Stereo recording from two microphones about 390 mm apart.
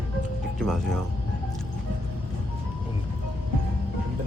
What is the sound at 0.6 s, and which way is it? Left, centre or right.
Speech, centre.